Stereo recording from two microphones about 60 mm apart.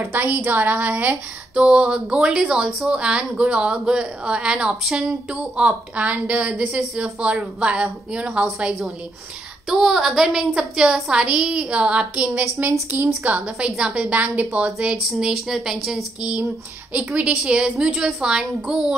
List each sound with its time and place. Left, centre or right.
0.1 s a woman's voice: right
1.6 s a woman's voice: centre
5.6 s a woman's voice: right
9.7 s a woman's voice: centre; by 13.4 s right
13.6 s a woman's voice: centre
15.0 s a woman's voice: centre
16.2 s a woman's voice: right
17.1 s a woman's voice: centre